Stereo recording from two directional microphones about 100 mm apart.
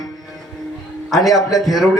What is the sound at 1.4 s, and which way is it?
Speech, 35° left (ahead or behind).